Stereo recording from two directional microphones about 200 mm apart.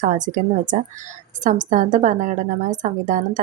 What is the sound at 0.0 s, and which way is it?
A woman's voice, 40° right (ahead or behind).